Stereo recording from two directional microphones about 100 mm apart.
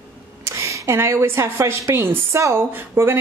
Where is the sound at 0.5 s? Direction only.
30° right (ahead or behind).